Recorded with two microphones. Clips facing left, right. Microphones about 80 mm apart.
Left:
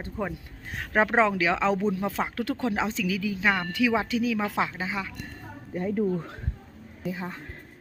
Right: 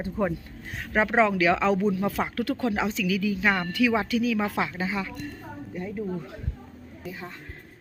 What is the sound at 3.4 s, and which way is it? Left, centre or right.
Speech, centre.